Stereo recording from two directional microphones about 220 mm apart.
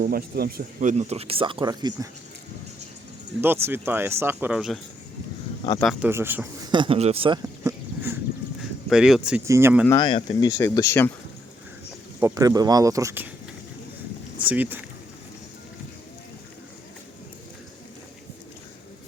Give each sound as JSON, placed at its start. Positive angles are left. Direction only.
{"t": 0.0, "sound": "speech", "side_deg": -40}
{"t": 3.4, "sound": "speech", "side_deg": -10}
{"t": 5.8, "sound": "speech", "side_deg": 0}
{"t": 6.1, "sound": "speech", "side_deg": -10}
{"t": 6.7, "sound": "speech", "side_deg": -20}
{"t": 7.4, "sound": "a sound", "side_deg": -15}
{"t": 8.9, "sound": "speech", "side_deg": 0}
{"t": 9.8, "sound": "speech", "side_deg": 20}
{"t": 12.2, "sound": "speech", "side_deg": -15}
{"t": 14.4, "sound": "speech", "side_deg": -5}